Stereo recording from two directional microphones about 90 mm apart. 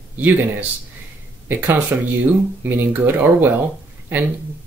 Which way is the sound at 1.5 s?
25° right (ahead or behind).